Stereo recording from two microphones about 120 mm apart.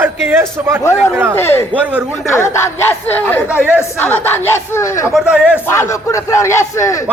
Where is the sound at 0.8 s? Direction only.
25° left (ahead or behind).